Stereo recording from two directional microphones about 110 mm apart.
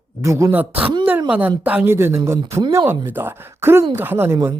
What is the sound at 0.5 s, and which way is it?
A woman's voice, 15° right (ahead or behind).